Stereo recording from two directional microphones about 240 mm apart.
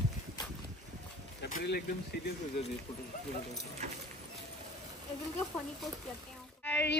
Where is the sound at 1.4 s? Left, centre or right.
Left.